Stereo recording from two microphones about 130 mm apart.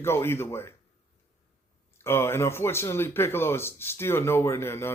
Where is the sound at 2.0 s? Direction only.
20° left (ahead or behind).